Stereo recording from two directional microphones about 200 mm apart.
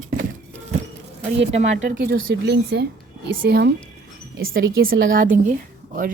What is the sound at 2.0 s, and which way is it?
A woman's voice, 50° right (ahead or behind).